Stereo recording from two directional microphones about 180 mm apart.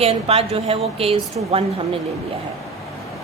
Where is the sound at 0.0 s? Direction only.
35° right (ahead or behind).